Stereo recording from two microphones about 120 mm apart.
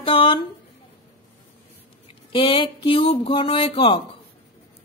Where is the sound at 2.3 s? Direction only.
50° left (ahead or behind).